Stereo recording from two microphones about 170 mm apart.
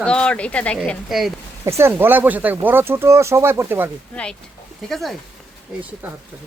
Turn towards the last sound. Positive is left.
turn(degrees=0)  # may be behind; listen again after turning